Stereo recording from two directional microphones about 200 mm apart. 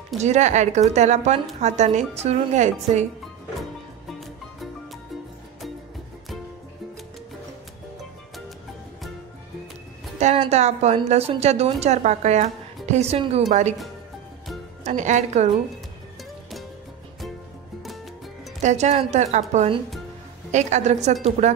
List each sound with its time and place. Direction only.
0.2 s a woman's voice: 35° right (ahead or behind)
10.1 s a woman's voice: 30° right (ahead or behind)
14.8 s a woman's voice: 35° right (ahead or behind)
18.6 s a woman's voice: 35° right (ahead or behind)